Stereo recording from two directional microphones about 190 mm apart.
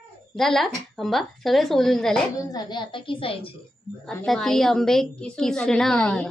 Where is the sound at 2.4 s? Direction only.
20° left (ahead or behind).